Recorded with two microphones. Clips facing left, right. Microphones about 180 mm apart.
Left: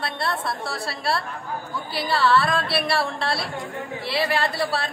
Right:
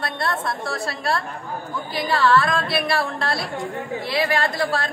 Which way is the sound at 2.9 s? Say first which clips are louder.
Right 1 dB; centre (ahead or behind).